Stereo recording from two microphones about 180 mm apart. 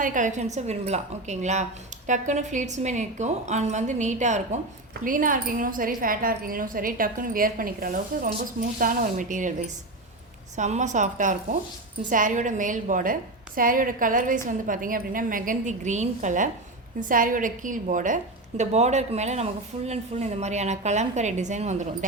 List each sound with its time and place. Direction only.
0.0 s a woman's voice: 45° right (ahead or behind)